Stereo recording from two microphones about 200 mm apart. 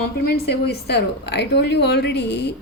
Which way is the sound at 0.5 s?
55° left (ahead or behind).